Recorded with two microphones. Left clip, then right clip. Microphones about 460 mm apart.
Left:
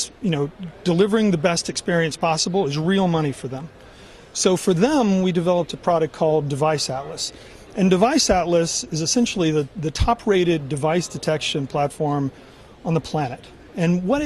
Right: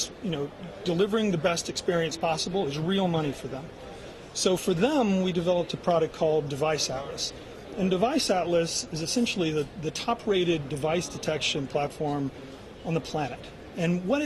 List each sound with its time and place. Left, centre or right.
0.0 s a sound: left
0.9 s speech: left
4.4 s speech: left
7.9 s speech: left